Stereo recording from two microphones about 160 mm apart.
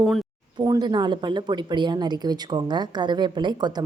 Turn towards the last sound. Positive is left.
turn(degrees=-25)  # may be behind; listen again after turning